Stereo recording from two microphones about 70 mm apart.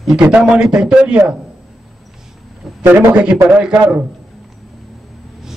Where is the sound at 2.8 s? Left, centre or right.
Right.